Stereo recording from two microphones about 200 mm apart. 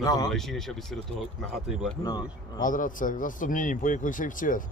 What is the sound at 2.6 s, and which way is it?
A man's voice, 40° left (ahead or behind).